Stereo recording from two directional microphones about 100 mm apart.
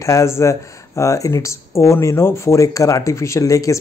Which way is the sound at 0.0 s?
30° left (ahead or behind).